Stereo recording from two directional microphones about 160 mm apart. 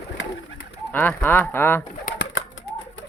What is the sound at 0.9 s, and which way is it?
Speech, 10° left (ahead or behind).